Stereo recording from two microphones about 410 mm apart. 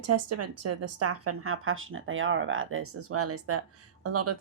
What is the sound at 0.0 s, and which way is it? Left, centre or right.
A woman's voice, right.